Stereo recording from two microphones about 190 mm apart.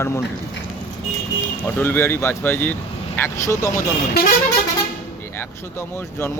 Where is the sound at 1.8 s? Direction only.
10° left (ahead or behind).